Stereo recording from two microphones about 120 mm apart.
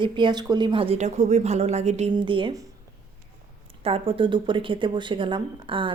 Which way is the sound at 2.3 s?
45° right (ahead or behind).